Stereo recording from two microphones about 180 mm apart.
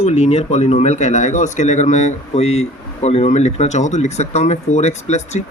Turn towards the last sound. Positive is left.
turn(degrees=40)  # may be behind; listen again after turning